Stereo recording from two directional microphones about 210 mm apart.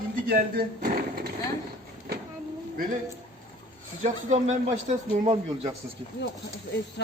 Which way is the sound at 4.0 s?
35° right (ahead or behind).